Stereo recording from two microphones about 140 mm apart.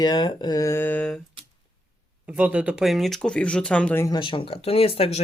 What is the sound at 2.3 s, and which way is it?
Speech, 10° right (ahead or behind).